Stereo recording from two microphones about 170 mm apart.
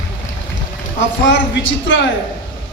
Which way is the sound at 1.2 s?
90° left.